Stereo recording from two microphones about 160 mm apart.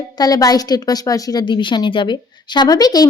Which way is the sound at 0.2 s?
25° left (ahead or behind).